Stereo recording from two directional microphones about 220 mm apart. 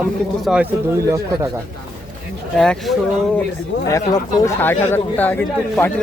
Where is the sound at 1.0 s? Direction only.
15° right (ahead or behind).